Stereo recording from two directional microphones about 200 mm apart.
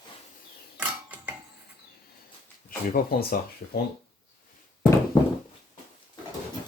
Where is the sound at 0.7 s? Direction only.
10° right (ahead or behind).